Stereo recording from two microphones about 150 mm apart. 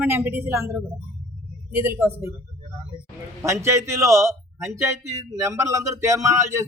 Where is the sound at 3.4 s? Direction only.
20° right (ahead or behind).